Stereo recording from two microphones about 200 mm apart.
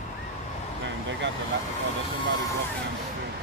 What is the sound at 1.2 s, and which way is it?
Vehicle, 60° right (ahead or behind).